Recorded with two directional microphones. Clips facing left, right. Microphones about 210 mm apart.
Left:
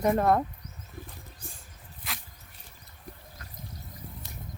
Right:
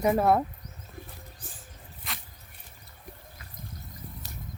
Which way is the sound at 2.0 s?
Centre (ahead or behind).